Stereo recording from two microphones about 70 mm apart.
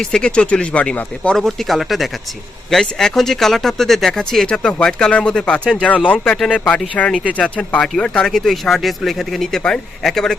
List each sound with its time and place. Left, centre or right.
0.0 s speech: centre
1.4 s speech: centre